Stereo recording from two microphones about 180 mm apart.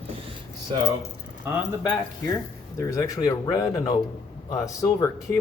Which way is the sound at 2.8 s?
20° left (ahead or behind).